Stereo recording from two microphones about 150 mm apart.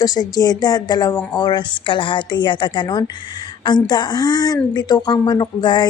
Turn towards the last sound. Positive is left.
turn(degrees=30)  # may be behind; listen again after turning